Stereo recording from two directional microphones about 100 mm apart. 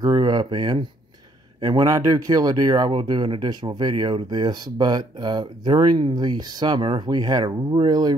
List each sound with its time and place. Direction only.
0.0 s speech: 45° right (ahead or behind)